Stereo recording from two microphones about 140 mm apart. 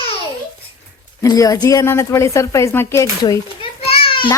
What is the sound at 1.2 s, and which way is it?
A woman's voice, 25° left (ahead or behind).